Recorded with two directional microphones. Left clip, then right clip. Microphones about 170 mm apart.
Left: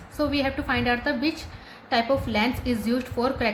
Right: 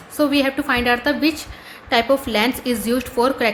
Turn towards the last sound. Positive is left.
turn(degrees=-20)  # may be behind; listen again after turning